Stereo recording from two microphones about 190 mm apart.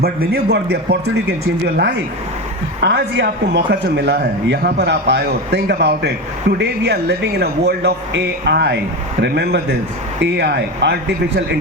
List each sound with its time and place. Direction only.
0.0 s speech: 55° right (ahead or behind)